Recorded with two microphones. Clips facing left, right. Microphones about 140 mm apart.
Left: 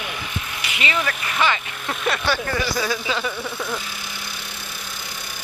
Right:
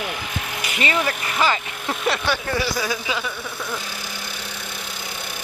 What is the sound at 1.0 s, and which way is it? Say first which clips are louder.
Speech: right 1 dB; 35° right (ahead or behind).